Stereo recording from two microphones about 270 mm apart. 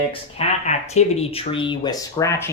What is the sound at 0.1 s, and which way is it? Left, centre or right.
Speech, left.